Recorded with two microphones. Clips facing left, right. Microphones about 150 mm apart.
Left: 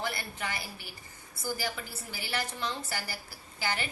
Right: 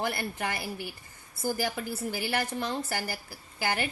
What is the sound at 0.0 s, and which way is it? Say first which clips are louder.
A woman's voice: right 4 dB; 50° right (ahead or behind).